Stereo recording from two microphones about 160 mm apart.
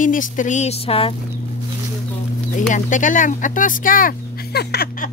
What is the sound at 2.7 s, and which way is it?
Speech, 55° left (ahead or behind).